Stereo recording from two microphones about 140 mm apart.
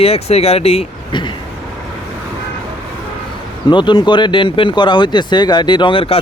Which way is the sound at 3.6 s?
35° left (ahead or behind).